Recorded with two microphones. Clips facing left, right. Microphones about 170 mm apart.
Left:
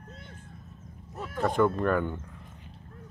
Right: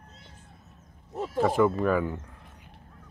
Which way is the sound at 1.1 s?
25° right (ahead or behind).